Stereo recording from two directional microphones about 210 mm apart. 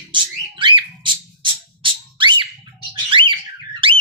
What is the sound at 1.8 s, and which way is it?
Music, 25° right (ahead or behind).